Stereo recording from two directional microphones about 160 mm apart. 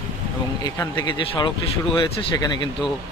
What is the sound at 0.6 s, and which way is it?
Speech, 25° left (ahead or behind).